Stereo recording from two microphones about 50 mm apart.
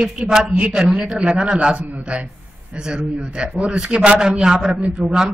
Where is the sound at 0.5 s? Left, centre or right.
Right.